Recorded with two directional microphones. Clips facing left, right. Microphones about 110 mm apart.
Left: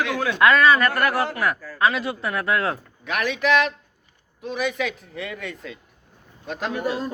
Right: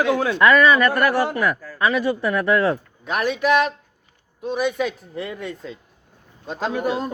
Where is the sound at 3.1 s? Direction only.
40° right (ahead or behind); by 7.1 s 25° right (ahead or behind).